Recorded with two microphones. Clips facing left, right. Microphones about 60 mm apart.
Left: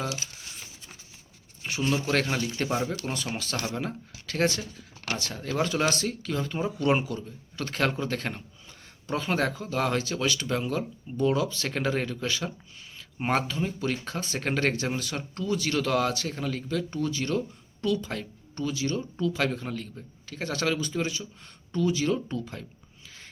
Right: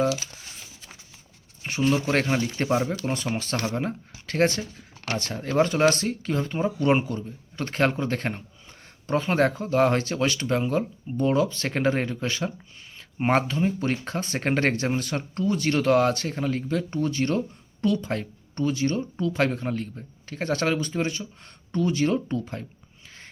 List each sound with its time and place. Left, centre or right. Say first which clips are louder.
2.3 s speech: right 4 dB; right
2.6 s speech: right 6 dB; centre
3.0 s speech: right 5 dB; right
5.3 s speech: right 6 dB; right
17.1 s speech: right 4 dB; right